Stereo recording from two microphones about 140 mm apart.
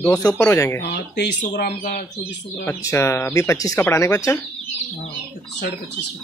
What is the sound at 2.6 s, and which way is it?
Speech, 20° left (ahead or behind).